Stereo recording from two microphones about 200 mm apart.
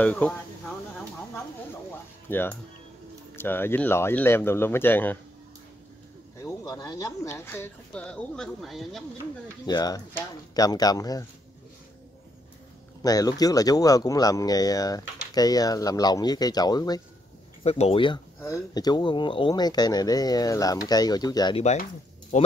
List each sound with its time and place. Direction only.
0.0 s speech: 5° left (ahead or behind)
2.2 s speech: 10° left (ahead or behind)
6.4 s speech: 20° left (ahead or behind); by 9.0 s centre (ahead or behind)
9.7 s speech: 20° left (ahead or behind)
13.0 s speech: 20° left (ahead or behind)
17.6 s speech: 30° left (ahead or behind)
22.3 s speech: 40° left (ahead or behind)